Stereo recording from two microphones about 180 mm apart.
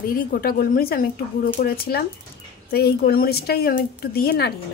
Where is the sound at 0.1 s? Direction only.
55° left (ahead or behind).